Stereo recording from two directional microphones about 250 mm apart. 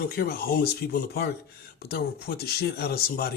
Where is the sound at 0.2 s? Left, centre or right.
Left.